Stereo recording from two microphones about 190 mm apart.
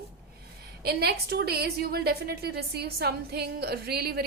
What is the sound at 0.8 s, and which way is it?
A woman's voice, 55° right (ahead or behind).